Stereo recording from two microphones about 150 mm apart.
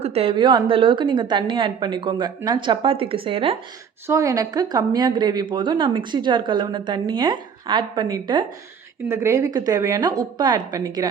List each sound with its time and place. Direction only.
0.0 s a woman's voice: 40° right (ahead or behind)
4.0 s speech: 20° right (ahead or behind)
9.0 s speech: 20° right (ahead or behind)